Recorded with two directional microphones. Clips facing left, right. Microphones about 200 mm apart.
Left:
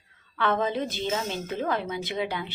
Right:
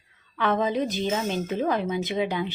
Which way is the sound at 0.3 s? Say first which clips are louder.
Right 2 dB; 15° right (ahead or behind).